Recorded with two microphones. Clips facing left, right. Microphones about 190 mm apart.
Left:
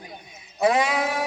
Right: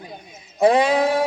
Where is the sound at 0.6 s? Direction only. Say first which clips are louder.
Right 5 dB; 35° right (ahead or behind).